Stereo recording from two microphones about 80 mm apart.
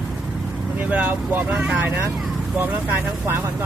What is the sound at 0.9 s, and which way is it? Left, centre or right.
Vehicle, right.